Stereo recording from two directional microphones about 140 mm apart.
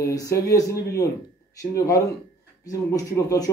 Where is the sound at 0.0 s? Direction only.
25° left (ahead or behind).